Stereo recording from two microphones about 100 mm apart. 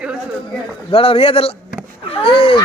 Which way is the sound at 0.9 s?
70° left (ahead or behind).